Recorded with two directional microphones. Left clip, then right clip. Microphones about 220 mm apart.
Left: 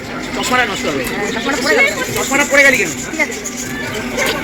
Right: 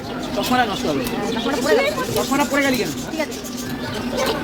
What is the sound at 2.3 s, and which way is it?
Speech, 45° right (ahead or behind).